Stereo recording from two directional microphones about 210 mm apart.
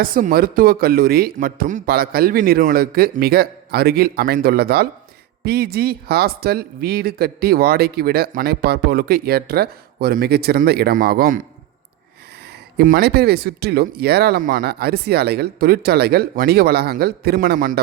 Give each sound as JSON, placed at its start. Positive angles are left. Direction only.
{"t": 0.0, "sound": "speech", "side_deg": -40}
{"t": 12.7, "sound": "speech", "side_deg": -45}